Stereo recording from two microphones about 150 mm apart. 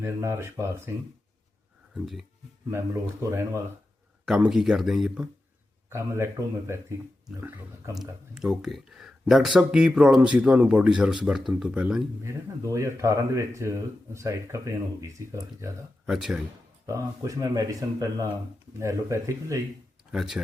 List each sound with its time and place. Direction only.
0.0 s speech: 15° right (ahead or behind)
2.6 s speech: 20° right (ahead or behind)
4.3 s speech: 5° right (ahead or behind)
5.9 s speech: 15° right (ahead or behind)
7.3 s speech: 10° right (ahead or behind)
8.4 s speech: 5° right (ahead or behind)
12.2 s speech: 20° right (ahead or behind)
16.0 s speech: centre (ahead or behind)
16.8 s speech: 20° right (ahead or behind)
20.1 s speech: 5° right (ahead or behind)